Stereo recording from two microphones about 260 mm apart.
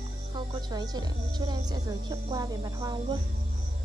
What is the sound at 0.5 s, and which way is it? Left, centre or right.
Speech, centre.